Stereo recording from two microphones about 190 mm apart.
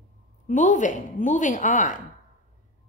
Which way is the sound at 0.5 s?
40° left (ahead or behind).